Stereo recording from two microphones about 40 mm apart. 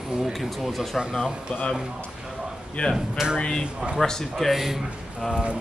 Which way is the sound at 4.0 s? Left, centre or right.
Centre.